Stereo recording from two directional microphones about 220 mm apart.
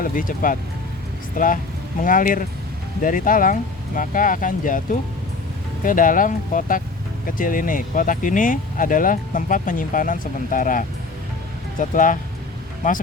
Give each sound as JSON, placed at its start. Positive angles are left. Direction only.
{"t": 0.0, "sound": "speech", "side_deg": 40}